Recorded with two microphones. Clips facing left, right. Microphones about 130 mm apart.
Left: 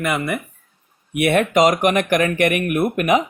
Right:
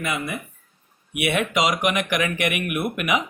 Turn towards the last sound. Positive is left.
turn(degrees=40)  # may be behind; listen again after turning